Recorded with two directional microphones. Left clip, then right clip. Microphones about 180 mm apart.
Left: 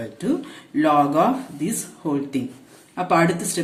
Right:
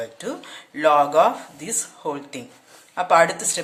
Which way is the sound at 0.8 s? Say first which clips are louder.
Right 2 dB; 35° right (ahead or behind).